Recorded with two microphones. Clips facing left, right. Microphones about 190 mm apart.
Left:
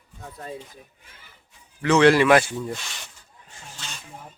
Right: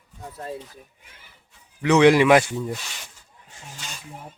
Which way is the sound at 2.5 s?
5° right (ahead or behind).